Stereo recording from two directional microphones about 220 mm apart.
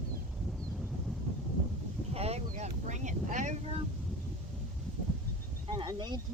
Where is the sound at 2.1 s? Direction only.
30° right (ahead or behind).